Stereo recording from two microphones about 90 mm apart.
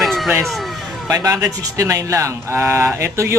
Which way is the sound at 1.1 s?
40° right (ahead or behind).